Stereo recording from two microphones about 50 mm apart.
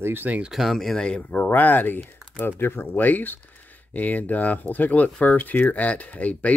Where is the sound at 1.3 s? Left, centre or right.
Left.